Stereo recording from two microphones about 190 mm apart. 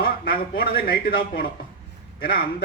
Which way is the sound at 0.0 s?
50° left (ahead or behind).